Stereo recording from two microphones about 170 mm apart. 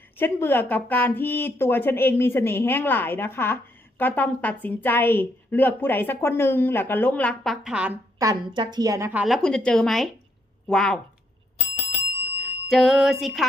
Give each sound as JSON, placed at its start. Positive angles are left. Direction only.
{"t": 0.2, "sound": "speech", "side_deg": 10}
{"t": 8.2, "sound": "a woman's voice", "side_deg": -25}
{"t": 9.2, "sound": "speech", "side_deg": 0}
{"t": 12.6, "sound": "speech", "side_deg": 0}